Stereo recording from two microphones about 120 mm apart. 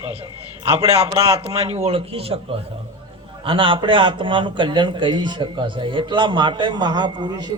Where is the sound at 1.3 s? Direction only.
60° right (ahead or behind).